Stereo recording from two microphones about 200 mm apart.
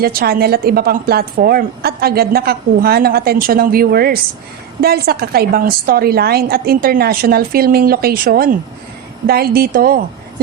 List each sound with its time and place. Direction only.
0.0 s a woman's voice: 50° right (ahead or behind)